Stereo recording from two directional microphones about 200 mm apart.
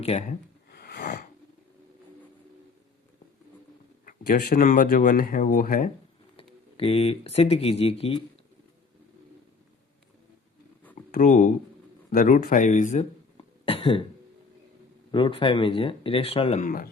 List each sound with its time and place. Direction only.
0.0 s speech: 35° left (ahead or behind)
0.7 s snort: 50° left (ahead or behind)
4.0 s speech: 45° left (ahead or behind)
6.3 s speech: 30° left (ahead or behind)
11.1 s speech: 40° left (ahead or behind)
13.3 s cough: 25° left (ahead or behind)
15.1 s speech: 25° left (ahead or behind); by 16.9 s 45° left (ahead or behind)